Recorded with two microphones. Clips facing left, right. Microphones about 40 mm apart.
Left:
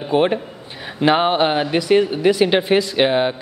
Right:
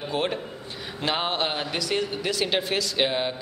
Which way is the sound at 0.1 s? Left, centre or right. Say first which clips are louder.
Left 11 dB; left.